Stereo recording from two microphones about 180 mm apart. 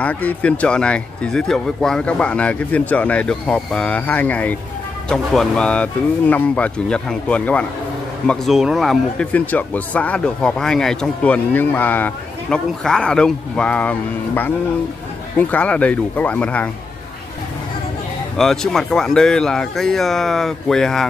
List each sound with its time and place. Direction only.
0.0 s speech: 10° left (ahead or behind)
18.4 s speech: centre (ahead or behind)